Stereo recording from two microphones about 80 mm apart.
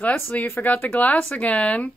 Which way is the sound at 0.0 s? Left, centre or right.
Left.